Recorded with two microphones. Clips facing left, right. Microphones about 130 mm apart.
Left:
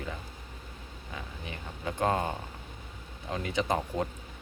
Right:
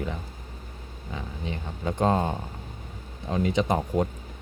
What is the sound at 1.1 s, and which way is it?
Speech, 25° right (ahead or behind).